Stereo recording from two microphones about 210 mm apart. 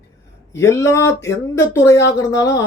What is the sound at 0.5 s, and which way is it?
Speech, 15° left (ahead or behind).